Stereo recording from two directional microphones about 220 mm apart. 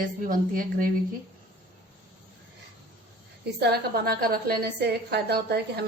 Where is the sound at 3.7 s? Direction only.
45° right (ahead or behind).